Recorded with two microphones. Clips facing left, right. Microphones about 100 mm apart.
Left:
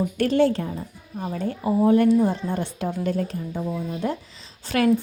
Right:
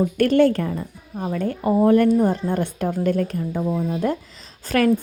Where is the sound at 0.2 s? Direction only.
55° right (ahead or behind).